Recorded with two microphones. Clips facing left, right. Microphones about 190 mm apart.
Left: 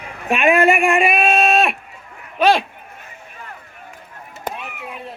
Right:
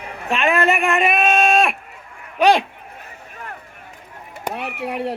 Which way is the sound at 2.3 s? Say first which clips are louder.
Even; 15° right (ahead or behind).